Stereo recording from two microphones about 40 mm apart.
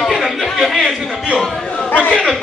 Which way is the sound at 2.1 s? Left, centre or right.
Centre.